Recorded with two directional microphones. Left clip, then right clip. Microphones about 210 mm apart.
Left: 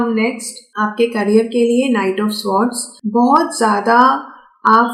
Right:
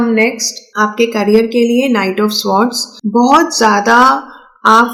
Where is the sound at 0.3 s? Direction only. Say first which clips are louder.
Right 6 dB; 20° right (ahead or behind).